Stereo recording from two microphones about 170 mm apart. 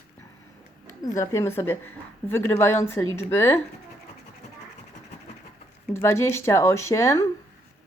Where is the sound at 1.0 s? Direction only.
20° left (ahead or behind).